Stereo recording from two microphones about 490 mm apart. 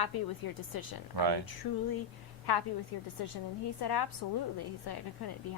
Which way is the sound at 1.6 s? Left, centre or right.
Left.